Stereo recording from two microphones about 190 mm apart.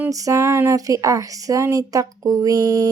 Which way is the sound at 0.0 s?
15° right (ahead or behind).